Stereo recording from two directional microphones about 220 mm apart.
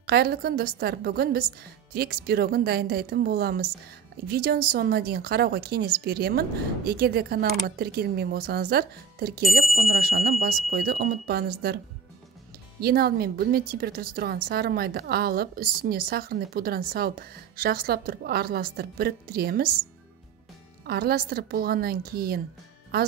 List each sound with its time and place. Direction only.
0.0 s a woman's voice: 45° right (ahead or behind)
12.8 s a woman's voice: 45° right (ahead or behind)